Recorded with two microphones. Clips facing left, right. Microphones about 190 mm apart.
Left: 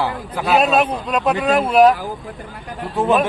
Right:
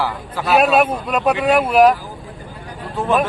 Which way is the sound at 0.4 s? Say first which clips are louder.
Right 1 dB; centre (ahead or behind).